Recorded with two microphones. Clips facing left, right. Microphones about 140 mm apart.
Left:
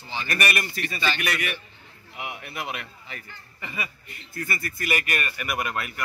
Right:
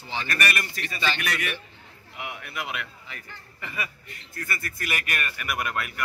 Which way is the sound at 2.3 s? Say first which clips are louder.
Right 1 dB; 30° left (ahead or behind).